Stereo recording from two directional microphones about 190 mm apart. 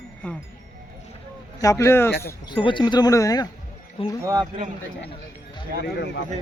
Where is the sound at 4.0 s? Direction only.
30° left (ahead or behind).